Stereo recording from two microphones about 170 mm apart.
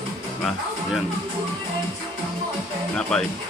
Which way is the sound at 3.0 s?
5° left (ahead or behind).